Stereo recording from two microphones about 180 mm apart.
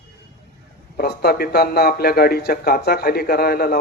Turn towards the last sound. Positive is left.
turn(degrees=60)  # may be behind; listen again after turning